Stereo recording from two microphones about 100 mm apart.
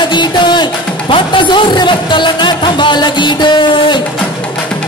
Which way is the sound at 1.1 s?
50° left (ahead or behind).